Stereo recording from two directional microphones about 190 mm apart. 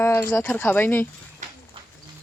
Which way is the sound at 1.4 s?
40° right (ahead or behind).